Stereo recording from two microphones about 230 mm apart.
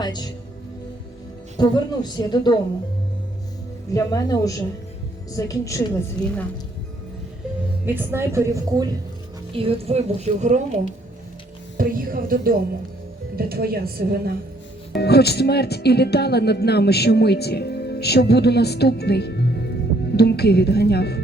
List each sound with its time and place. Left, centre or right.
0.0 s speech: centre
1.5 s speech: centre
3.9 s speech: centre
7.9 s a woman's voice: centre
9.5 s a woman's voice: right
11.8 s a woman's voice: right
14.9 s speech: left